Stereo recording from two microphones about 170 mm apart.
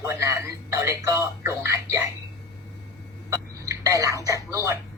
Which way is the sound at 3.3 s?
20° right (ahead or behind).